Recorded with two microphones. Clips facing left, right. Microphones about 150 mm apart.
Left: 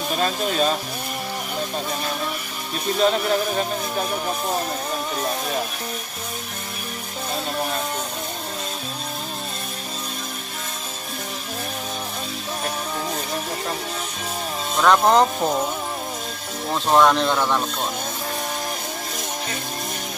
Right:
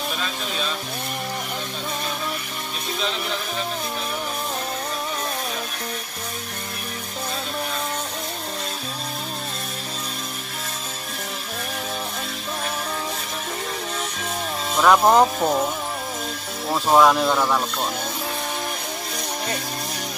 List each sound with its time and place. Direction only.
0.1 s speech: 45° left (ahead or behind)
3.0 s music: 45° left (ahead or behind)
14.8 s speech: 5° right (ahead or behind)
16.6 s speech: 5° right (ahead or behind)